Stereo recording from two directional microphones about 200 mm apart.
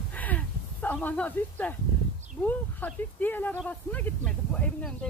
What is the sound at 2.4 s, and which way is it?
Speech, 10° left (ahead or behind).